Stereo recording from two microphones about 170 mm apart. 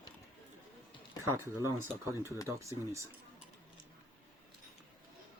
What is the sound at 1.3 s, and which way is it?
Speech, 15° right (ahead or behind).